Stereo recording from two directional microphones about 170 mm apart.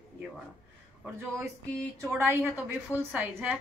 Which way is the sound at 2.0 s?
15° right (ahead or behind).